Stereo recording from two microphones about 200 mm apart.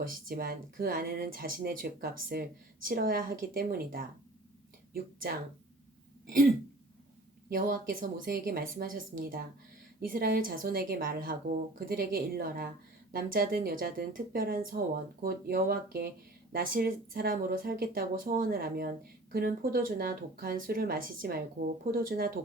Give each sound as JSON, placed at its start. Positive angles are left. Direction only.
{"t": 0.0, "sound": "speech", "side_deg": -45}
{"t": 6.2, "sound": "throat clearing", "side_deg": -45}
{"t": 7.5, "sound": "speech", "side_deg": -45}